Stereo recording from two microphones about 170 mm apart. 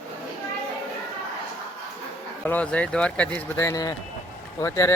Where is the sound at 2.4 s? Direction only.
5° left (ahead or behind).